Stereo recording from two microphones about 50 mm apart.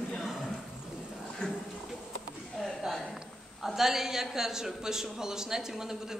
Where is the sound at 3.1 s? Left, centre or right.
Centre.